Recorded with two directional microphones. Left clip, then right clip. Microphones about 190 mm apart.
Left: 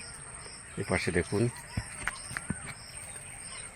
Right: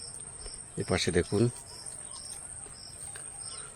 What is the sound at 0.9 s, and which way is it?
Speech, 30° right (ahead or behind).